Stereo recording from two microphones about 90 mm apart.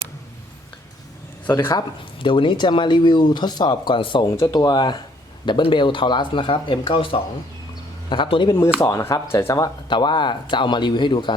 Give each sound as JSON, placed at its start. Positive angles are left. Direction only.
{"t": 2.2, "sound": "speech", "side_deg": 65}
{"t": 4.4, "sound": "speech", "side_deg": 40}
{"t": 8.8, "sound": "speech", "side_deg": 40}
{"t": 9.6, "sound": "speech", "side_deg": 60}